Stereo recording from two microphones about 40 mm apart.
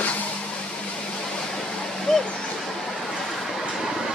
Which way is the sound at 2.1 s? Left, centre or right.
Centre.